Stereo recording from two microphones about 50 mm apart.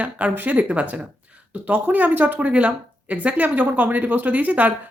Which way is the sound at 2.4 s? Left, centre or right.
Right.